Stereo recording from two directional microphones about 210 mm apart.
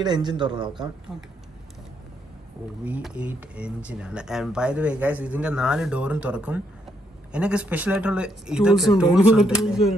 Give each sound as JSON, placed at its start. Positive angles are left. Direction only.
{"t": 0.0, "sound": "a man's voice", "side_deg": -20}
{"t": 1.1, "sound": "speech", "side_deg": 0}
{"t": 2.8, "sound": "speech", "side_deg": -5}